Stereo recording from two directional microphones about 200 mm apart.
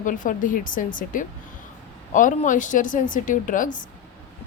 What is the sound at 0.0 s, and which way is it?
A woman's voice, 40° left (ahead or behind).